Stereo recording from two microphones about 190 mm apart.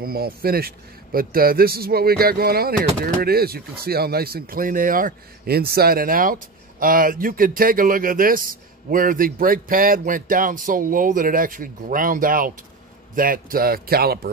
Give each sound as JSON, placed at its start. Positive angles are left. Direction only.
{"t": 0.0, "sound": "a man's voice", "side_deg": -55}